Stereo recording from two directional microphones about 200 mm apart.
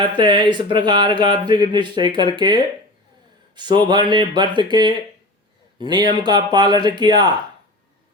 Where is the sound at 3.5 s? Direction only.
20° right (ahead or behind).